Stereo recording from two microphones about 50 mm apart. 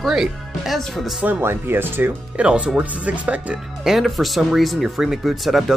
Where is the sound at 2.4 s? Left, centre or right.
Right.